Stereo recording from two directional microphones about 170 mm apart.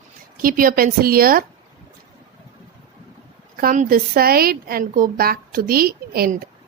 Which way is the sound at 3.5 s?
55° right (ahead or behind).